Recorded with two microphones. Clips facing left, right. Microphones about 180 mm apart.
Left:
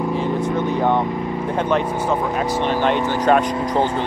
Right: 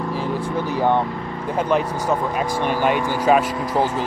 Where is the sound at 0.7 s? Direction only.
5° right (ahead or behind).